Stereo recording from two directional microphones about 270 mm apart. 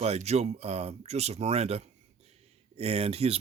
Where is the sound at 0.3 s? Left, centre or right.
Right.